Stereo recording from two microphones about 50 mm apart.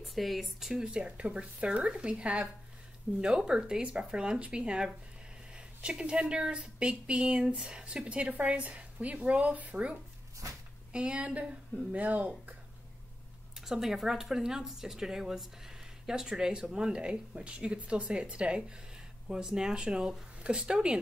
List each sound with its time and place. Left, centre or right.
0.0 s speech: centre; by 9.9 s right
10.4 s a sound: right
10.9 s speech: centre
13.6 s speech: centre